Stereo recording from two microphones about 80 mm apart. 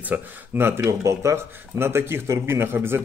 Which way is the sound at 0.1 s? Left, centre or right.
Right.